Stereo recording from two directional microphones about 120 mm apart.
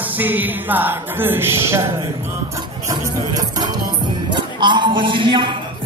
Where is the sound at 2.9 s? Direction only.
30° right (ahead or behind).